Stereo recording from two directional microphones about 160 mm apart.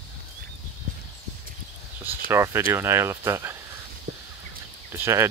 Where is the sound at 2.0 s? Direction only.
15° right (ahead or behind).